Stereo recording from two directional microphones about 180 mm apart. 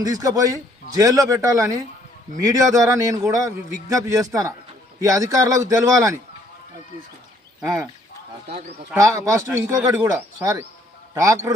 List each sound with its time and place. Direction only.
0.0 s a man's voice: 20° right (ahead or behind)
7.6 s speech: 15° right (ahead or behind)
9.0 s a man's voice: 20° right (ahead or behind)